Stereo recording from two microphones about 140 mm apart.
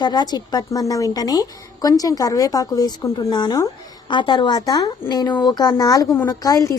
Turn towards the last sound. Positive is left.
turn(degrees=25)  # may be behind; listen again after turning